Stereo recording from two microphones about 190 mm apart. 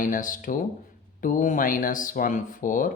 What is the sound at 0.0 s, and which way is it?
Speech, 45° left (ahead or behind).